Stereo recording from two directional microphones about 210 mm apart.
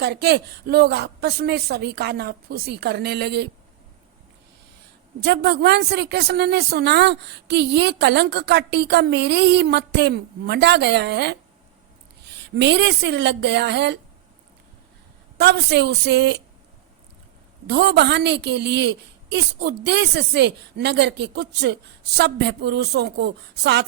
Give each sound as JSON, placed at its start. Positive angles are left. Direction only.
{"t": 0.0, "sound": "speech", "side_deg": -50}
{"t": 5.2, "sound": "speech", "side_deg": -50}
{"t": 15.4, "sound": "speech", "side_deg": -50}
{"t": 17.7, "sound": "speech", "side_deg": -50}